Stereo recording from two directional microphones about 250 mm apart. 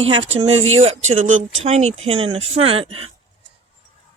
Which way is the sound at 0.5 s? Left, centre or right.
Right.